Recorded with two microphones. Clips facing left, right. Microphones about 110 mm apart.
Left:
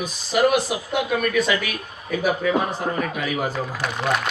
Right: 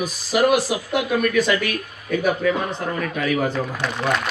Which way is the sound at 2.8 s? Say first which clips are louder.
Even; 5° left (ahead or behind).